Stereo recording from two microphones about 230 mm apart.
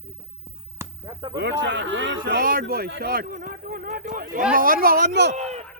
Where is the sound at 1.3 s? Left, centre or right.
Right.